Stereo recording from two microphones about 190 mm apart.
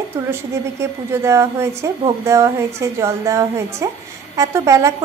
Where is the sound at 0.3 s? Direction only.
15° right (ahead or behind).